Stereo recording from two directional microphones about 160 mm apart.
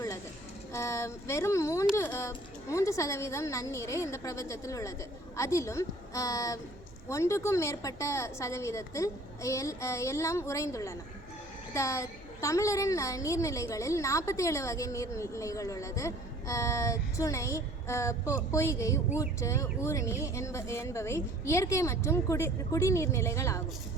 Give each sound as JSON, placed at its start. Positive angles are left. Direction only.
{"t": 0.7, "sound": "a woman's voice", "side_deg": 20}